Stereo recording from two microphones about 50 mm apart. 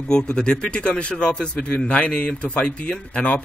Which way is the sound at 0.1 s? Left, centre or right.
Centre.